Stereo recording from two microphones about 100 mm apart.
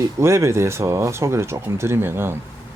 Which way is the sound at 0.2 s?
25° right (ahead or behind).